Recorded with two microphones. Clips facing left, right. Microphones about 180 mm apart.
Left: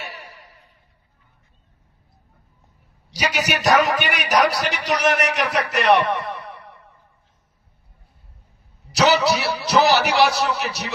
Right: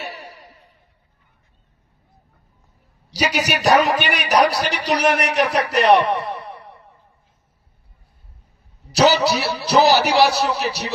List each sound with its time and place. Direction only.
0.0 s a sound: 40° right (ahead or behind)
3.1 s a man's voice: 35° right (ahead or behind)
9.0 s a man's voice: 35° right (ahead or behind)